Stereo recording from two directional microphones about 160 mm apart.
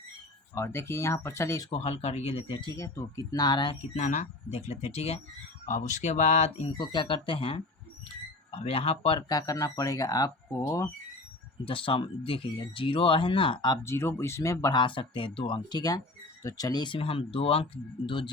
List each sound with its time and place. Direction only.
0.5 s speech: 15° left (ahead or behind)
1.7 s speech: 40° left (ahead or behind)
2.7 s speech: 20° left (ahead or behind)
3.9 s speech: 50° left (ahead or behind)
6.7 s speech: 30° left (ahead or behind)
9.3 s speech: 20° left (ahead or behind)
11.6 s speech: 35° left (ahead or behind)
13.8 s speech: 15° left (ahead or behind); by 18.3 s 30° left (ahead or behind)